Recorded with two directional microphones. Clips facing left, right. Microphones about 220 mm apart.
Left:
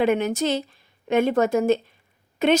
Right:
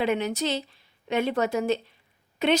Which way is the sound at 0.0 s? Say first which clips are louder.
Left 5 dB; 50° left (ahead or behind).